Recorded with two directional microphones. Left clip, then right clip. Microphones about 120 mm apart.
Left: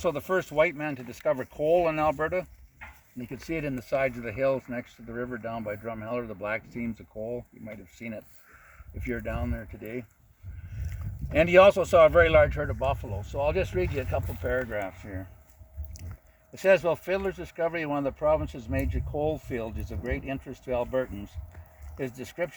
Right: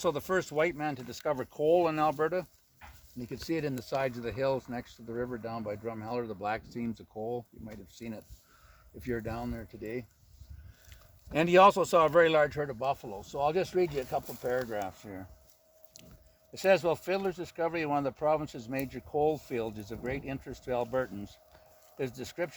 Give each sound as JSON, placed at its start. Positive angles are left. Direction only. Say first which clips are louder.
{"t": 0.0, "sound": "speech", "louder": "left 3 dB", "side_deg": -35}
{"t": 5.1, "sound": "speech", "louder": "left 2 dB", "side_deg": -25}
{"t": 11.3, "sound": "speech", "louder": "left 4 dB", "side_deg": -35}
{"t": 16.6, "sound": "speech", "louder": "left 4 dB", "side_deg": -30}